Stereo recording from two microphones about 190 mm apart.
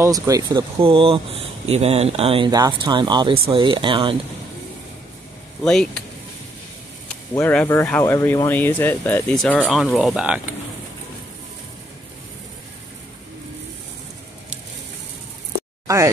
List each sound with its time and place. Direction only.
0.0 s speech: 20° right (ahead or behind)
5.6 s speech: 5° left (ahead or behind)
7.3 s speech: 10° left (ahead or behind); by 10.5 s 5° right (ahead or behind)